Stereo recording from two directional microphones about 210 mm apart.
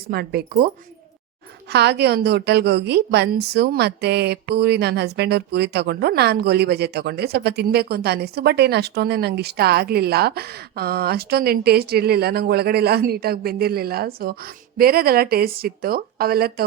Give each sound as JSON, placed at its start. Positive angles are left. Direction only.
{"t": 0.1, "sound": "a woman's voice", "side_deg": -50}
{"t": 1.7, "sound": "a woman's voice", "side_deg": -50}